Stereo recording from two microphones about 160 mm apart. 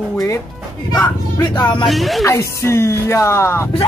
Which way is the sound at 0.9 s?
20° left (ahead or behind).